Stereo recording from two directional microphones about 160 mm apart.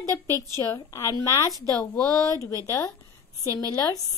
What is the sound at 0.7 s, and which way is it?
Speech, 20° left (ahead or behind).